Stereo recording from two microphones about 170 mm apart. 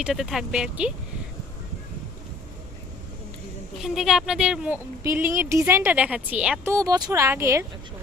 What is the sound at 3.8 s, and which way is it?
Speech, centre (ahead or behind).